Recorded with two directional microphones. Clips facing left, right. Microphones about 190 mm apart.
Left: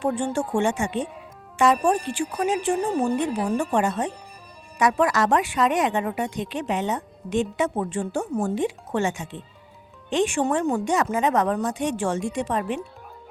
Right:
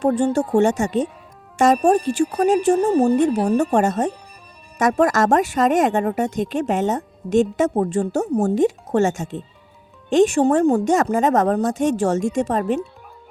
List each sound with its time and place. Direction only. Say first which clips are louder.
0.0 s a woman's voice: right 6 dB; 40° right (ahead or behind)